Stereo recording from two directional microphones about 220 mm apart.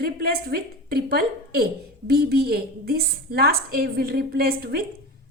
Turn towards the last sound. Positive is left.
turn(degrees=-45)  # may be behind; listen again after turning